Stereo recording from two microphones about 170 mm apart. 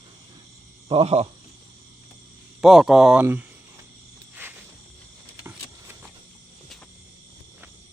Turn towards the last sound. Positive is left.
turn(degrees=-15)  # may be behind; listen again after turning